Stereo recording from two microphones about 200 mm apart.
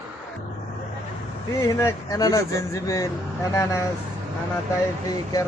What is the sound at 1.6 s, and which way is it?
Speech, 15° left (ahead or behind).